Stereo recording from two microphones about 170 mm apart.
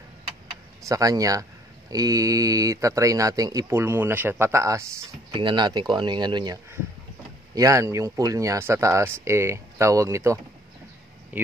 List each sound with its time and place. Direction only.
0.8 s speech: 20° right (ahead or behind)
5.3 s speech: 30° right (ahead or behind)
11.3 s speech: 10° right (ahead or behind)